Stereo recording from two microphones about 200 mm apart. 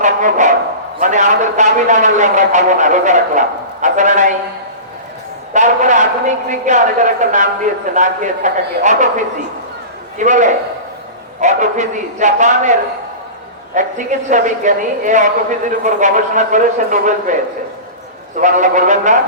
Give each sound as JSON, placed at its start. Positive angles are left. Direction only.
{"t": 0.0, "sound": "a woman's voice", "side_deg": -40}
{"t": 5.5, "sound": "a woman's voice", "side_deg": -35}
{"t": 10.2, "sound": "a woman's voice", "side_deg": -40}
{"t": 13.7, "sound": "a woman's voice", "side_deg": -40}
{"t": 18.3, "sound": "a woman's voice", "side_deg": -40}